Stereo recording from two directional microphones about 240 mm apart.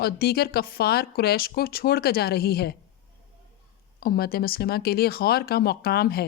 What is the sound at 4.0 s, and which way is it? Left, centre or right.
Speech, left.